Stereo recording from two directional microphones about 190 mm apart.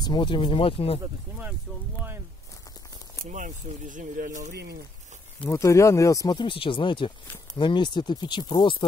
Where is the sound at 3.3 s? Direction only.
40° right (ahead or behind).